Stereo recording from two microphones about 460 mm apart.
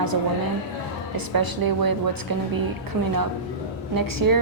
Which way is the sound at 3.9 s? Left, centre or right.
Right.